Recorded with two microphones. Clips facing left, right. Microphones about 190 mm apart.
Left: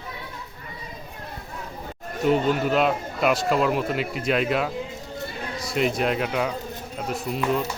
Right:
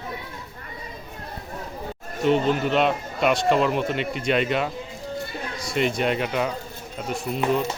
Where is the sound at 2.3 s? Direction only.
5° left (ahead or behind).